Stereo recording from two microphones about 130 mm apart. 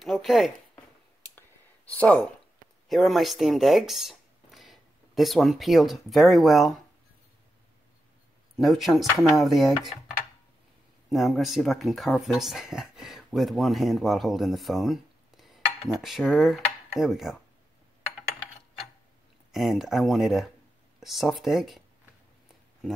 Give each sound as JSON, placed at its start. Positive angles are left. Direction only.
{"t": 0.0, "sound": "speech", "side_deg": 0}
{"t": 1.9, "sound": "speech", "side_deg": 10}
{"t": 8.5, "sound": "speech", "side_deg": 0}
{"t": 11.1, "sound": "speech", "side_deg": 0}
{"t": 19.5, "sound": "speech", "side_deg": 0}